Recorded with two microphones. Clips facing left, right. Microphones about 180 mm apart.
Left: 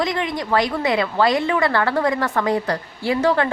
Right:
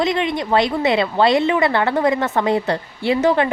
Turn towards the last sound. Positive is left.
turn(degrees=-20)  # may be behind; listen again after turning